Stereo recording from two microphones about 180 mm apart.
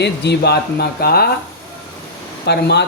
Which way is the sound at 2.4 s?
65° left (ahead or behind).